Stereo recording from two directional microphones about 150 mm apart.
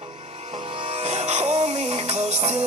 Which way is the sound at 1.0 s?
50° right (ahead or behind).